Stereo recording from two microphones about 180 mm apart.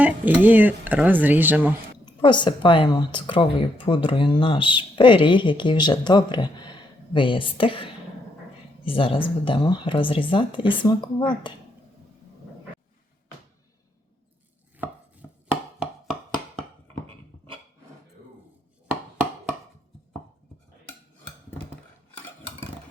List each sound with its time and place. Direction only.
0.0 s speech: 10° right (ahead or behind)
2.2 s speech: 25° left (ahead or behind)
15.2 s chopping: 5° right (ahead or behind)
17.1 s a sound: 30° right (ahead or behind)